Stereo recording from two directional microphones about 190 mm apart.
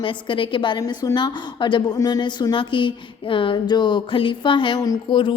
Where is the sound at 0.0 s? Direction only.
25° left (ahead or behind).